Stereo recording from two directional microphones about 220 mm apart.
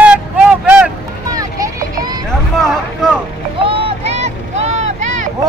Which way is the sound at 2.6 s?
Centre (ahead or behind).